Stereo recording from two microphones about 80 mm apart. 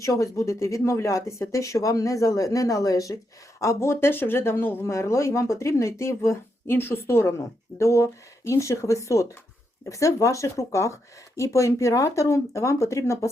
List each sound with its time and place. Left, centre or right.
0.0 s speech: left